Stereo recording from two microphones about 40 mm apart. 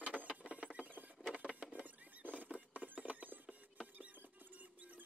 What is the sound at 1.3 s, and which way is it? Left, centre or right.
Rodents, right.